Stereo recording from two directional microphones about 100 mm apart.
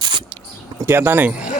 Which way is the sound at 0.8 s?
20° right (ahead or behind).